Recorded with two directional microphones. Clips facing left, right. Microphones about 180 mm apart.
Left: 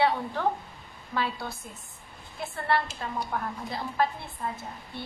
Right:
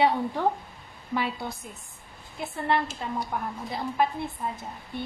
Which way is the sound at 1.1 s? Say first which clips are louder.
Right 2 dB; 15° right (ahead or behind).